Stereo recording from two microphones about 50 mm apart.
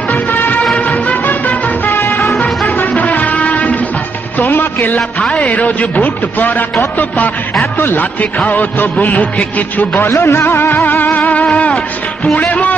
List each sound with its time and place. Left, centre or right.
0.1 s music: left
2.3 s music: left
4.4 s music: left
5.3 s a man's voice: left
9.9 s music: left